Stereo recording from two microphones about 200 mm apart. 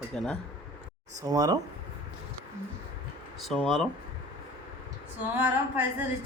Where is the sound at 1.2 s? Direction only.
20° right (ahead or behind).